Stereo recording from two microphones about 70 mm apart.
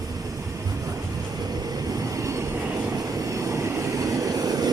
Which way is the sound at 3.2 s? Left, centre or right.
Right.